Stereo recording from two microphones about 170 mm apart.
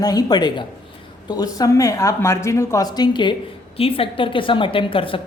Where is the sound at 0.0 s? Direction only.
20° left (ahead or behind).